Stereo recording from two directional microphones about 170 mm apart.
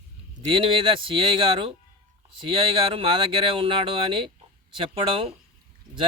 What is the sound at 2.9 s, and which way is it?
A man's voice, 30° right (ahead or behind).